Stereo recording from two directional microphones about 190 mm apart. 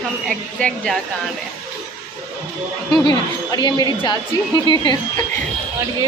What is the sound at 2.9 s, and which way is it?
A woman's voice, 25° left (ahead or behind).